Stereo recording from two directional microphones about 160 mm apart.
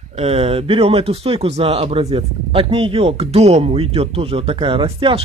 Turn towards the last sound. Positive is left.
turn(degrees=-35)  # may be behind; listen again after turning